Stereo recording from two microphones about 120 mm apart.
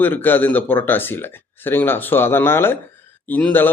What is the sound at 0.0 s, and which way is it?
A man's voice, 15° left (ahead or behind).